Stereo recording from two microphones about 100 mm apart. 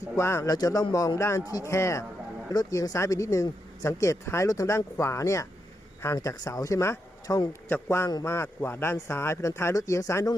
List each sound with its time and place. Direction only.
0.2 s speech: 25° left (ahead or behind)